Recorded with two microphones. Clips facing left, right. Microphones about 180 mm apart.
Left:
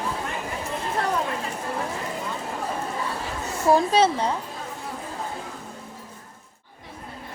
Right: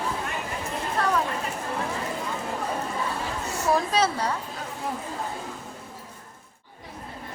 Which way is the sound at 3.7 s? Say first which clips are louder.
Left 5 dB; 30° left (ahead or behind).